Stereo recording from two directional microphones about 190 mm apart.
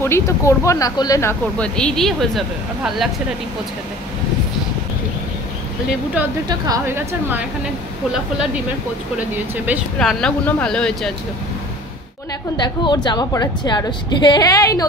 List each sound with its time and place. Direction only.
0.0 s speech: 15° left (ahead or behind)
1.6 s speech: 5° left (ahead or behind)
6.7 s a woman's voice: 10° right (ahead or behind)
9.9 s speech: 5° left (ahead or behind)
12.5 s a woman's voice: 20° left (ahead or behind)